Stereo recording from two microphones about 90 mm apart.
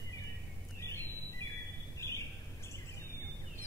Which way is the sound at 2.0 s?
30° left (ahead or behind).